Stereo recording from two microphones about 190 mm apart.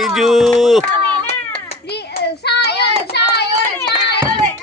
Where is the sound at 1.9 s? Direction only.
60° left (ahead or behind).